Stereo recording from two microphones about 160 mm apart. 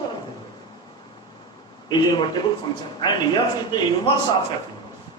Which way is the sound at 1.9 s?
30° left (ahead or behind).